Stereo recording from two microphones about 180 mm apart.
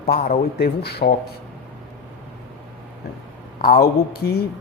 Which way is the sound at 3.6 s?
60° left (ahead or behind).